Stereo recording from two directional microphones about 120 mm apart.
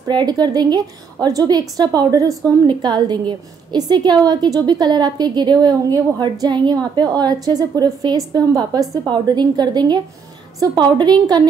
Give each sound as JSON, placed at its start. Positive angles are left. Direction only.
{"t": 0.1, "sound": "a woman's voice", "side_deg": -35}